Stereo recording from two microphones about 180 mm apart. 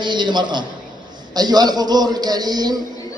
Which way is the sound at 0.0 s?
25° right (ahead or behind).